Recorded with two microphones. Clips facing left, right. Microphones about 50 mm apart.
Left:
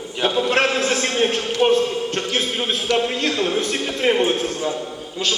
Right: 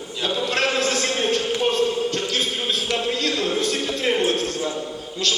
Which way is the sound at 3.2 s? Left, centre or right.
Left.